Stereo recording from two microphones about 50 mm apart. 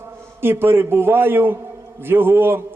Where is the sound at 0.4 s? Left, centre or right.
Right.